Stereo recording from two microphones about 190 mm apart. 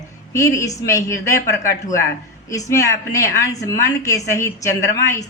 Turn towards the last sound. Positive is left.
turn(degrees=15)  # may be behind; listen again after turning